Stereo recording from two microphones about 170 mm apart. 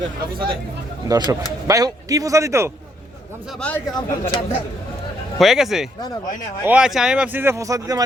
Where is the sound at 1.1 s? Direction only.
25° right (ahead or behind).